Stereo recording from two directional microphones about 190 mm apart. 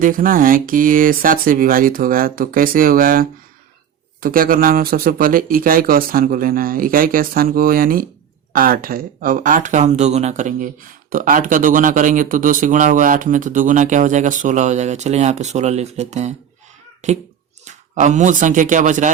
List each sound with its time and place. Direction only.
0.0 s a child's voice: 45° right (ahead or behind)